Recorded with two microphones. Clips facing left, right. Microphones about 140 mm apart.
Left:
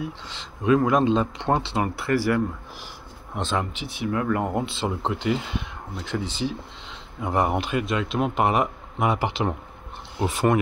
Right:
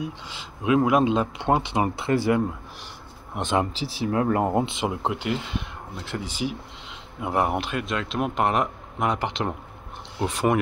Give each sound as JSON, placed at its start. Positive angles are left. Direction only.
{"t": 0.0, "sound": "speech", "side_deg": -10}
{"t": 3.7, "sound": "speech", "side_deg": -35}